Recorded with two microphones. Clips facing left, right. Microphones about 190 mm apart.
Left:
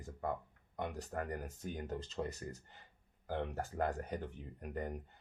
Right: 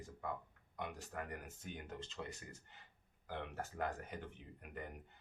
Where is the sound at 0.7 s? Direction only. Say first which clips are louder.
Left 5 dB; 40° left (ahead or behind).